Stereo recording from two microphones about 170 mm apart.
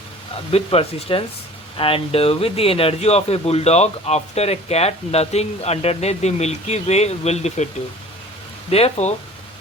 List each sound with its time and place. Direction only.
0.5 s speech: 35° left (ahead or behind)
8.7 s speech: 40° left (ahead or behind)